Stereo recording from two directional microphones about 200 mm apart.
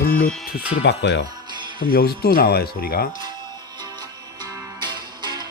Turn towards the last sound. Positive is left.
turn(degrees=-20)  # may be behind; listen again after turning